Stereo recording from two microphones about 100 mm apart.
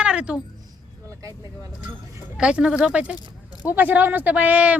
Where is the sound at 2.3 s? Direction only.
10° right (ahead or behind).